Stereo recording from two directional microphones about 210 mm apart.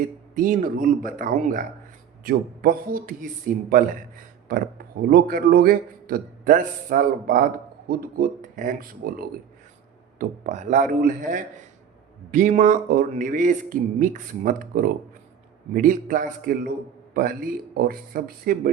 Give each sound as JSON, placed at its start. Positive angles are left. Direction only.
{"t": 0.3, "sound": "speech", "side_deg": -40}
{"t": 4.4, "sound": "speech", "side_deg": -45}